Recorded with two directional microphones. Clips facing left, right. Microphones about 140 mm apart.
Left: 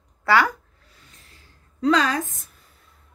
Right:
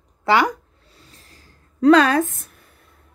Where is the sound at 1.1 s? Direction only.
35° right (ahead or behind).